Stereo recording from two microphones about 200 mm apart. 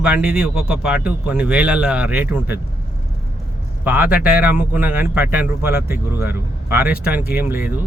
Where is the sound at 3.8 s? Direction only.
10° right (ahead or behind).